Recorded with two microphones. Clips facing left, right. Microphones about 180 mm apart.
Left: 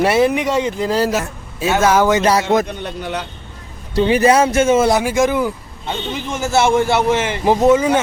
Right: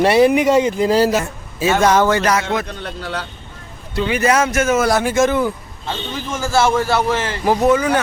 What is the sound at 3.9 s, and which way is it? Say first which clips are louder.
A man's voice: left 4 dB; 35° left (ahead or behind).